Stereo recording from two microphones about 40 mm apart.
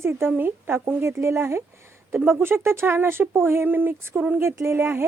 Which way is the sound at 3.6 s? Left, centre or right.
Right.